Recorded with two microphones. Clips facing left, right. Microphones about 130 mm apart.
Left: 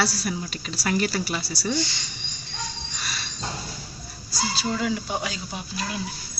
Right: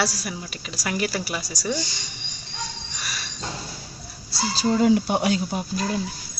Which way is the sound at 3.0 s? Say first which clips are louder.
Even; 10° right (ahead or behind).